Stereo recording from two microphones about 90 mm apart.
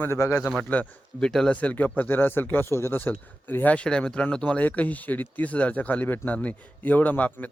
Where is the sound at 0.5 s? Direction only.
15° left (ahead or behind).